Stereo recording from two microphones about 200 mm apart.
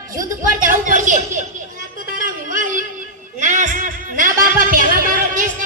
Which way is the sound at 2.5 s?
40° right (ahead or behind).